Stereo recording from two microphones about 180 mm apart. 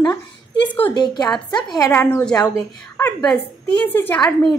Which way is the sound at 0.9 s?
25° left (ahead or behind).